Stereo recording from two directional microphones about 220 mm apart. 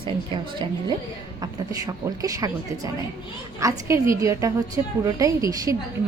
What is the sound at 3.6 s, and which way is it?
A woman's voice, 15° right (ahead or behind).